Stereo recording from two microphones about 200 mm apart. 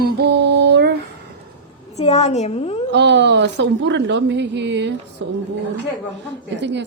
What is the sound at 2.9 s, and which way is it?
A woman's voice, 60° right (ahead or behind).